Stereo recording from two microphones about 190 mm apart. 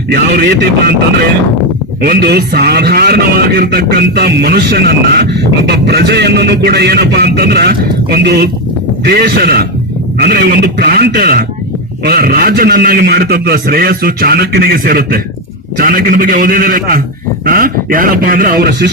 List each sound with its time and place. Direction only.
0.1 s a man's voice: 55° right (ahead or behind)
2.0 s a man's voice: 55° right (ahead or behind)